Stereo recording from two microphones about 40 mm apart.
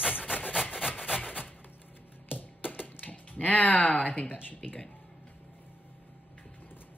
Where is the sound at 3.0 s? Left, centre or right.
Left.